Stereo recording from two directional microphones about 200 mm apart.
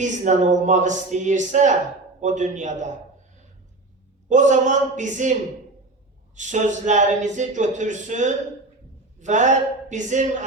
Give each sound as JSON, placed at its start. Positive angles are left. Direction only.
{"t": 0.0, "sound": "speech", "side_deg": -35}
{"t": 4.3, "sound": "speech", "side_deg": -35}